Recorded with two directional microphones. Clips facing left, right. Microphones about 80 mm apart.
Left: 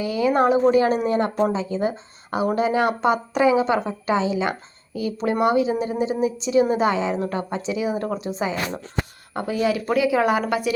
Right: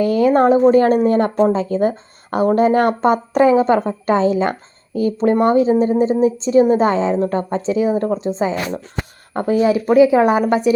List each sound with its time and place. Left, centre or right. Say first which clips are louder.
0.0 s a woman's voice: right 6 dB; right